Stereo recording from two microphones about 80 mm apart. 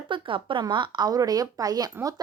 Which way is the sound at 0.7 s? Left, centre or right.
Right.